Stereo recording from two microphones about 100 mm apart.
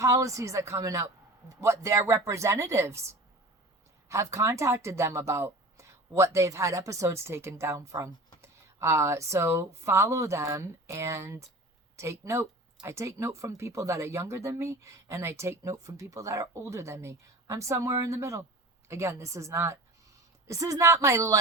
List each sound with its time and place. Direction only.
0.0 s speech: 30° right (ahead or behind)